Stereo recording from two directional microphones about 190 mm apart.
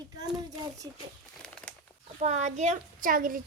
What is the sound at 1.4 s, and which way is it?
Crumpling, 5° left (ahead or behind).